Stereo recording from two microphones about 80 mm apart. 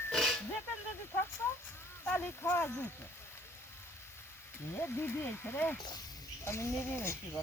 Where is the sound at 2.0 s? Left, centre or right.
Left.